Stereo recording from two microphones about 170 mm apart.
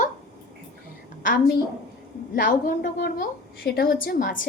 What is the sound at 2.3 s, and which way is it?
A woman's voice, 55° left (ahead or behind).